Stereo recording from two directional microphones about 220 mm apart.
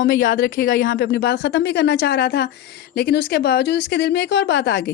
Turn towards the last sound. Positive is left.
turn(degrees=50)  # may be behind; listen again after turning